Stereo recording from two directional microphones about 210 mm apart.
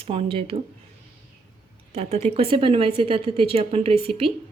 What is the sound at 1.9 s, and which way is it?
A woman's voice, 30° right (ahead or behind).